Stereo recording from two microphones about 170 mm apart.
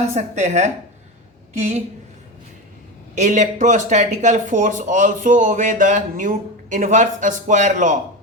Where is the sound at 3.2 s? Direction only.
45° right (ahead or behind).